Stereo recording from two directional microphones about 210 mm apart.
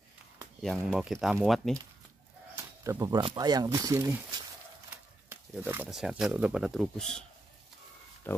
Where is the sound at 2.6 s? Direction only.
15° right (ahead or behind); by 7.2 s centre (ahead or behind).